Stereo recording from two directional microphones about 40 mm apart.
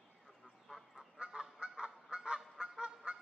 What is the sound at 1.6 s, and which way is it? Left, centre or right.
Honk, right.